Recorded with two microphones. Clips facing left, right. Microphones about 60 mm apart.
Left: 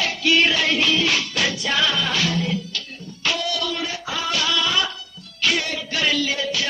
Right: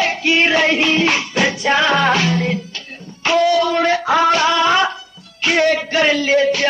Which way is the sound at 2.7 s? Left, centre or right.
Right.